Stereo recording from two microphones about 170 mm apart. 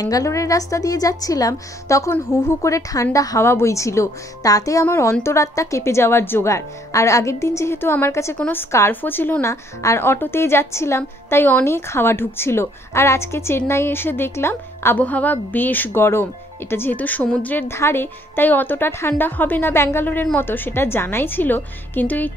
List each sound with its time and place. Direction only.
0.0 s a woman's voice: 20° left (ahead or behind)